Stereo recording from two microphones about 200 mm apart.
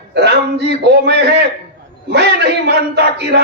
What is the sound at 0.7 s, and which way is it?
Speech, 55° right (ahead or behind).